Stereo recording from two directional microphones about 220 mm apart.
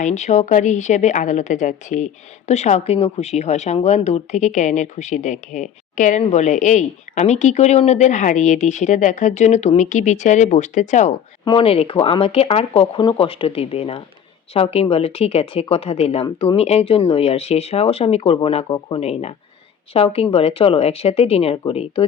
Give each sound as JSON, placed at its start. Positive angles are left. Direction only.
{"t": 0.0, "sound": "a woman's voice", "side_deg": 30}